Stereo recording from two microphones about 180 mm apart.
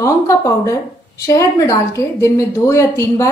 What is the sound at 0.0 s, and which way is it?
A woman's voice, 15° left (ahead or behind).